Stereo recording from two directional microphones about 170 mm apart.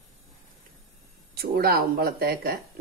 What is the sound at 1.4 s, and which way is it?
Speech, 65° right (ahead or behind).